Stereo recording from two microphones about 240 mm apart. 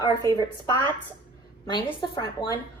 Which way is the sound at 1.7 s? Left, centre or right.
Centre.